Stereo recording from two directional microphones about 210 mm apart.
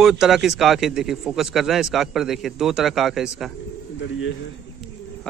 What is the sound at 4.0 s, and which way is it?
Speech, 60° left (ahead or behind).